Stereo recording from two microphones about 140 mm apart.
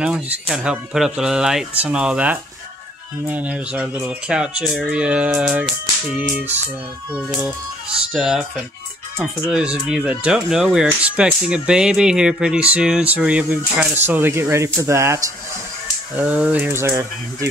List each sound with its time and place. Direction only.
0.0 s speech: 5° right (ahead or behind); by 15.2 s 20° right (ahead or behind)
16.2 s speech: 10° right (ahead or behind)